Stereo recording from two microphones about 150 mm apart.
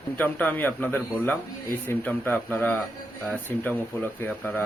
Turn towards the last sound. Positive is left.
turn(degrees=10)  # may be behind; listen again after turning